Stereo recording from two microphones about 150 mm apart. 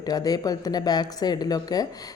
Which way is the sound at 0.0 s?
25° left (ahead or behind).